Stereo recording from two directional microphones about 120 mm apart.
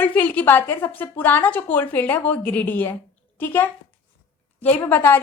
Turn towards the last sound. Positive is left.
turn(degrees=15)  # may be behind; listen again after turning